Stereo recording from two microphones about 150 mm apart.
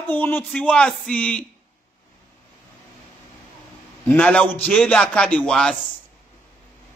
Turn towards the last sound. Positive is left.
turn(degrees=5)  # may be behind; listen again after turning